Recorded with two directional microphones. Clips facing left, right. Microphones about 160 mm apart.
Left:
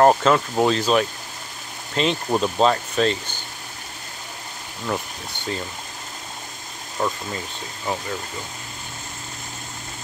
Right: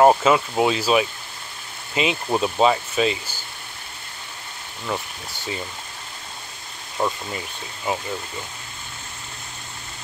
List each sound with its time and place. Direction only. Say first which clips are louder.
0.0 s speech: even; 5° right (ahead or behind)
4.8 s speech: left 1 dB; centre (ahead or behind)
7.0 s speech: right 1 dB; 20° right (ahead or behind)